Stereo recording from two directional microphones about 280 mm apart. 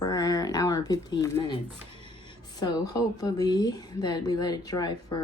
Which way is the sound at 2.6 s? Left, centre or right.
Centre.